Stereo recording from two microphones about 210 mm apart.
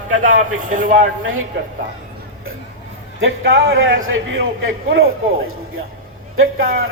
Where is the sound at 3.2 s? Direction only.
60° right (ahead or behind).